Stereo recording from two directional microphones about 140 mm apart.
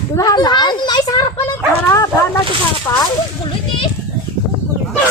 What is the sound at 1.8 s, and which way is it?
Bow-wow, 20° left (ahead or behind).